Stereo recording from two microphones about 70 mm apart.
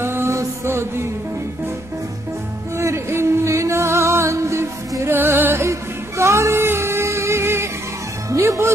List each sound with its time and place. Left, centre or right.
0.0 s music: right
2.8 s music: right